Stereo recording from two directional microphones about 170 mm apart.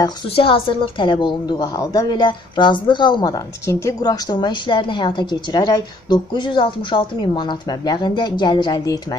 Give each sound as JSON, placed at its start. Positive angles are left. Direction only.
{"t": 0.0, "sound": "a woman's voice", "side_deg": 30}